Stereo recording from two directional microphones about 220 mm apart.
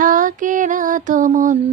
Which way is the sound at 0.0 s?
35° right (ahead or behind).